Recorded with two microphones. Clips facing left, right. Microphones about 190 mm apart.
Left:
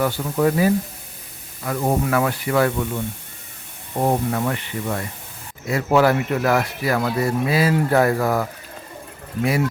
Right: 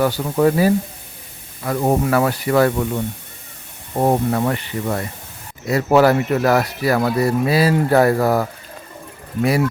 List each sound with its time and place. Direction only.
0.0 s speech: 40° right (ahead or behind)
4.0 s speech: 40° right (ahead or behind)